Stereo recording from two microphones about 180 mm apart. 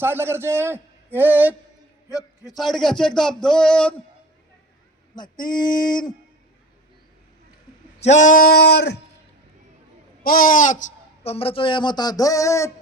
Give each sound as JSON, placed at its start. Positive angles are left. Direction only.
{"t": 0.0, "sound": "a man's voice", "side_deg": -10}
{"t": 2.0, "sound": "a man's voice", "side_deg": 20}
{"t": 2.6, "sound": "speech", "side_deg": 0}
{"t": 5.1, "sound": "speech", "side_deg": 25}
{"t": 8.0, "sound": "a sound", "side_deg": 40}
{"t": 10.2, "sound": "speech", "side_deg": 50}